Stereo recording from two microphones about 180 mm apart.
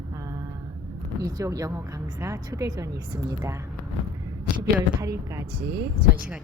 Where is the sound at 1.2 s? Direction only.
20° right (ahead or behind).